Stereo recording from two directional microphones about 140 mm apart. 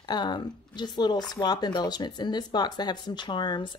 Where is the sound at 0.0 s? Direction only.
30° left (ahead or behind).